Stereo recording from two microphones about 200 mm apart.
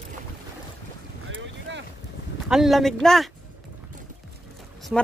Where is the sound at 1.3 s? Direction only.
65° right (ahead or behind).